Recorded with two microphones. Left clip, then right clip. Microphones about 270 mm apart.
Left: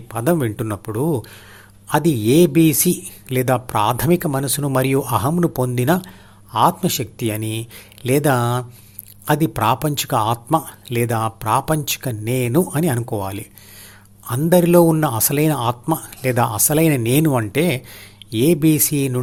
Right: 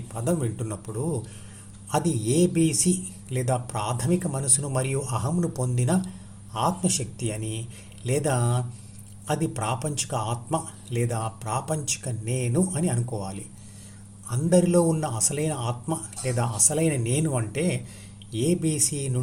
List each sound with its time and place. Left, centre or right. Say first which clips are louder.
0.1 s speech: left 9 dB; left